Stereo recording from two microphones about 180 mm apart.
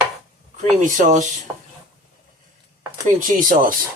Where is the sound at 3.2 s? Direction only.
50° right (ahead or behind).